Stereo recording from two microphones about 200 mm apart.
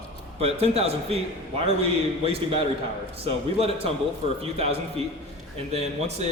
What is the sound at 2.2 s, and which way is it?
A man's voice, 30° right (ahead or behind).